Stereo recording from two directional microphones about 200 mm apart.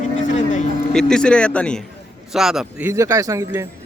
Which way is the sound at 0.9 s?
5° left (ahead or behind).